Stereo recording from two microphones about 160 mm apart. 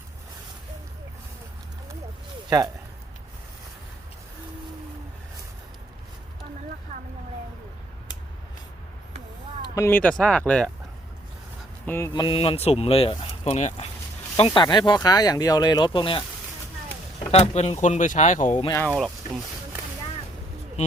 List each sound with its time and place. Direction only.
9.6 s speech: 20° left (ahead or behind)
11.9 s speech: 15° left (ahead or behind)
12.1 s speech: 30° left (ahead or behind)
14.3 s speech: 35° left (ahead or behind)
17.3 s speech: 45° left (ahead or behind)
18.9 s speech: centre (ahead or behind)